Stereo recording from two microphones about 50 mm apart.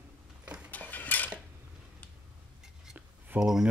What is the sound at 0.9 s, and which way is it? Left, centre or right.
Dishes, left.